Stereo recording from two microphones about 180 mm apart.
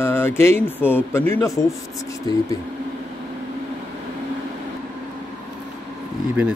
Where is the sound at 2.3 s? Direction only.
25° left (ahead or behind).